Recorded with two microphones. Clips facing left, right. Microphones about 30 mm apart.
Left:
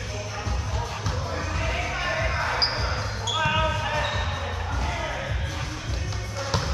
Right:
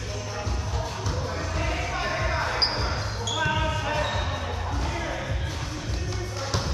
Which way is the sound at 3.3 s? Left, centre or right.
Left.